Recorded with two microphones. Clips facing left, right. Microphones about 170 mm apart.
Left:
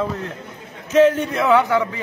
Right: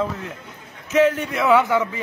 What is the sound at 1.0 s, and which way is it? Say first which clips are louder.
Speech: left 3 dB; 20° left (ahead or behind).